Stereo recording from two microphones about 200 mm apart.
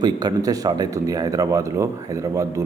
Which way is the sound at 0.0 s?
20° right (ahead or behind).